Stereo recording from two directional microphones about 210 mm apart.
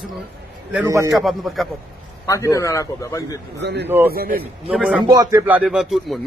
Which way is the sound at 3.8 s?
10° right (ahead or behind).